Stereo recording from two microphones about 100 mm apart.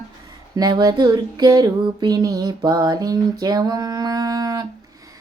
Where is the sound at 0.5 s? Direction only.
45° right (ahead or behind).